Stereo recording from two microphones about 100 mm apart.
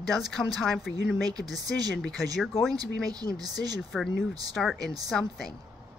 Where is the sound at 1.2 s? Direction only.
40° right (ahead or behind).